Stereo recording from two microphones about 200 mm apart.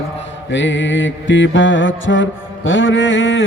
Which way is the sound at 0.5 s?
65° left (ahead or behind).